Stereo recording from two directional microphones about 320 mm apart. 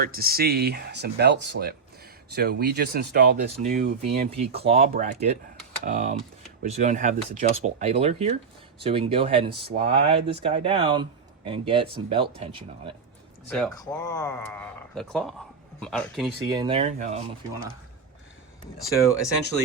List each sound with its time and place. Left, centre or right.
0.0 s speech: right
4.3 s speech: centre
13.5 s speech: centre
16.5 s speech: centre
18.6 s speech: centre